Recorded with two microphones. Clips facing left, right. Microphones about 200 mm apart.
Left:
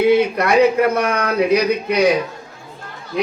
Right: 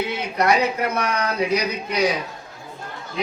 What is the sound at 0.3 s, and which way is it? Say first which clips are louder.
A man's voice: left 6 dB; 55° left (ahead or behind).